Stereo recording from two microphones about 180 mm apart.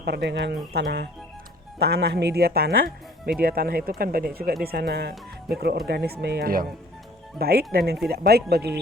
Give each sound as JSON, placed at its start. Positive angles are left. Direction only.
{"t": 0.0, "sound": "speech", "side_deg": -70}